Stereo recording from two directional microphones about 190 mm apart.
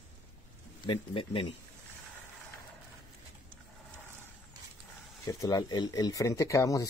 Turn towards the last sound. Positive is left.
turn(degrees=15)  # may be behind; listen again after turning